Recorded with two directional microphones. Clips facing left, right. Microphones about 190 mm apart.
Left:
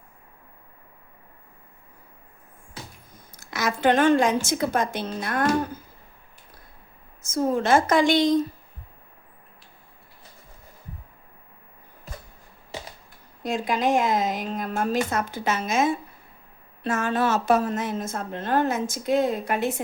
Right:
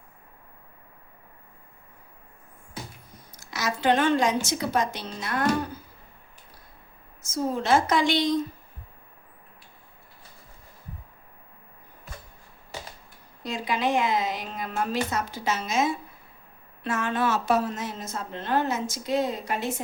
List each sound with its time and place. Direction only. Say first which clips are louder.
3.3 s a woman's voice: left 3 dB; 55° left (ahead or behind)
7.2 s a woman's voice: left 4 dB; 55° left (ahead or behind)
13.4 s a woman's voice: left 3 dB; 50° left (ahead or behind)